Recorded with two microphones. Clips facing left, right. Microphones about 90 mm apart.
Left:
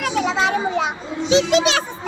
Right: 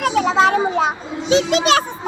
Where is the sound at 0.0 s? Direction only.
40° right (ahead or behind).